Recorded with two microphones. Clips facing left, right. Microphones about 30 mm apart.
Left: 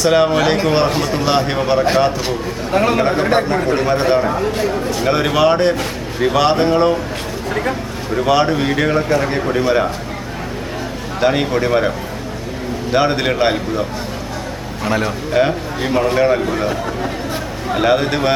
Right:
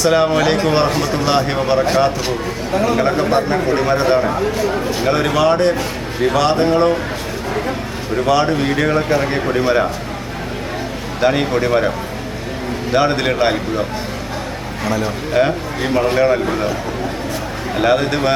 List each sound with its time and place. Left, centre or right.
0.0 s a man's voice: centre
2.7 s speech: left
3.9 s a man's voice: centre
4.7 s speech: centre
5.0 s speech: centre
8.1 s a man's voice: centre
11.2 s a man's voice: centre
14.8 s speech: left
15.3 s a man's voice: centre
17.7 s a man's voice: centre